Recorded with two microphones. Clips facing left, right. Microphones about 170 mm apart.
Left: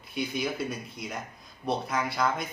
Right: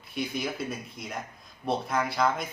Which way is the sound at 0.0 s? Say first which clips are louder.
Left 1 dB; centre (ahead or behind).